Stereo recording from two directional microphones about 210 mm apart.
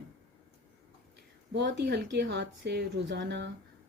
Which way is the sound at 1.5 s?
55° right (ahead or behind).